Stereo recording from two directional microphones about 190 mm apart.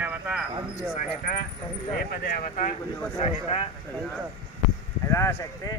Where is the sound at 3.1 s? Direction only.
30° left (ahead or behind).